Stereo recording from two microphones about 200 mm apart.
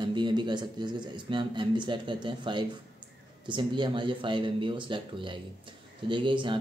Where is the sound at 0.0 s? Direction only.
25° right (ahead or behind).